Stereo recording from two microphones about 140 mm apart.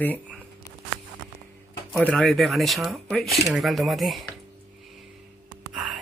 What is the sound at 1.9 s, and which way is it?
Speech, centre (ahead or behind).